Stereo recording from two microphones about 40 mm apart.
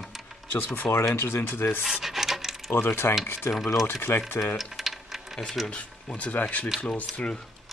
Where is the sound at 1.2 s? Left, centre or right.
Left.